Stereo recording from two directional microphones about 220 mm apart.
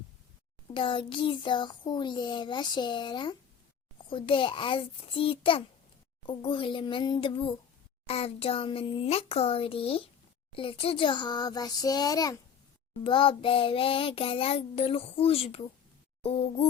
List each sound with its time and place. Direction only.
0.7 s a child's voice: 20° left (ahead or behind)